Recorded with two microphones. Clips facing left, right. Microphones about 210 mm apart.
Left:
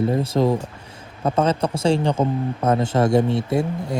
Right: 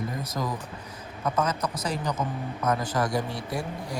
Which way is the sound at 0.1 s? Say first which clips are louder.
Left 12 dB; 30° left (ahead or behind).